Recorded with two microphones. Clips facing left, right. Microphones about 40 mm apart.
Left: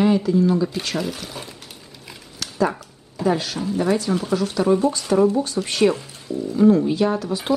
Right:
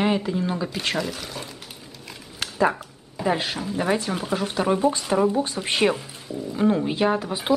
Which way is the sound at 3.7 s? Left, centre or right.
Right.